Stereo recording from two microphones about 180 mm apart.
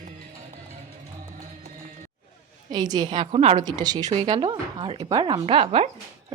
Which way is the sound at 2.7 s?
20° right (ahead or behind).